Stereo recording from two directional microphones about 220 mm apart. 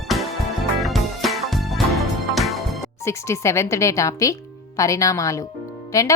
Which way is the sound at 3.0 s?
10° left (ahead or behind).